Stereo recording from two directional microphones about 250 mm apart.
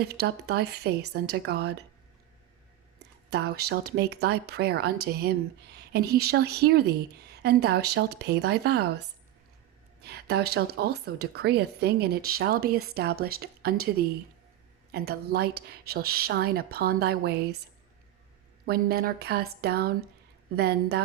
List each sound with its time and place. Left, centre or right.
0.0 s speech: right
3.0 s speech: right
18.6 s speech: right